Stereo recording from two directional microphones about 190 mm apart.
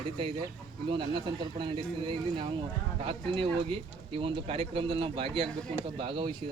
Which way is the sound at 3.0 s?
30° right (ahead or behind).